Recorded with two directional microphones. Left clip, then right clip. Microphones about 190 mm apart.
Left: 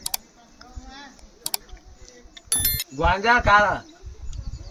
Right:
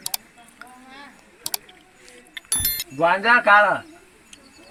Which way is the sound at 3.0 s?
45° left (ahead or behind).